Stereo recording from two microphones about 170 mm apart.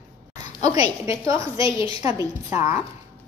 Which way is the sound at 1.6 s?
30° left (ahead or behind).